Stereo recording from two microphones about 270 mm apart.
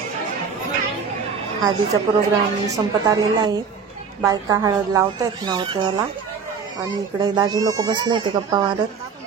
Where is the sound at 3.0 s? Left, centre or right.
Centre.